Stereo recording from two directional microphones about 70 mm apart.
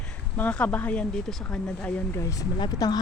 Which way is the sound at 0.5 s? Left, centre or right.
Centre.